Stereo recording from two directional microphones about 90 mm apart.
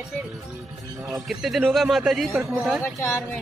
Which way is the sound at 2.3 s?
15° right (ahead or behind).